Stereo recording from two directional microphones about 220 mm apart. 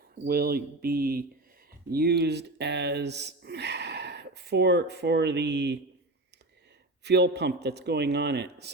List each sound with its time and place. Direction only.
0.3 s a man's voice: 45° right (ahead or behind)
7.0 s a man's voice: 50° right (ahead or behind)